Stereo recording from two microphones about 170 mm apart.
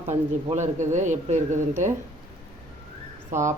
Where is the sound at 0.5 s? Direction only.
45° right (ahead or behind).